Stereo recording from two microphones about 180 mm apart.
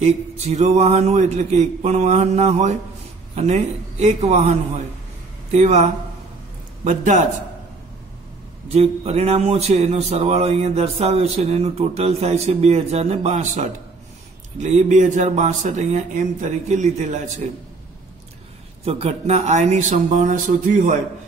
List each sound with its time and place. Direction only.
0.0 s speech: 40° right (ahead or behind)
8.7 s speech: 35° right (ahead or behind)
18.9 s speech: 35° right (ahead or behind)